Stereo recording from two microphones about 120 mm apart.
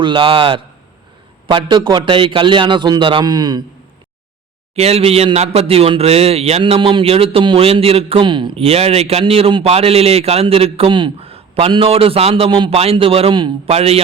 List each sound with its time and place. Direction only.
0.0 s a man's voice: 45° right (ahead or behind)
4.7 s a man's voice: 60° right (ahead or behind); by 8.6 s 40° right (ahead or behind)
8.6 s a man's voice: 55° right (ahead or behind)